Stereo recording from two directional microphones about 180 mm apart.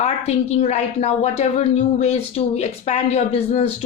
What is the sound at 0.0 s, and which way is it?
A woman's voice, 35° left (ahead or behind).